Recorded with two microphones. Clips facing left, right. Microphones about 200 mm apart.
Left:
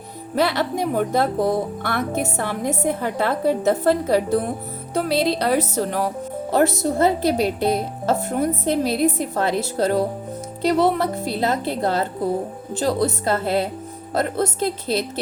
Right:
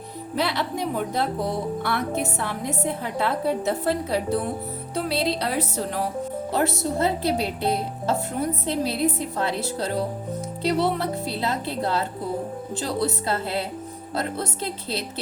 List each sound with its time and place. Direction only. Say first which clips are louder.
0.3 s a woman's voice: left 5 dB; 45° left (ahead or behind)